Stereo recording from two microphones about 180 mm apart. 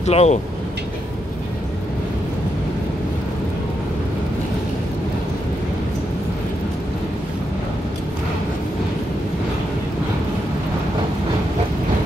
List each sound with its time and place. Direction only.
0.0 s speech: 35° left (ahead or behind)